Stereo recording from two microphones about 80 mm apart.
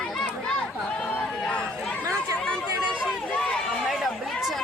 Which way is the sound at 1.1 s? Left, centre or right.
Centre.